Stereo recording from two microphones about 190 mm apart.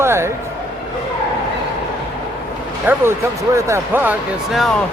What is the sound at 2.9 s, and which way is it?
Speech, 10° right (ahead or behind).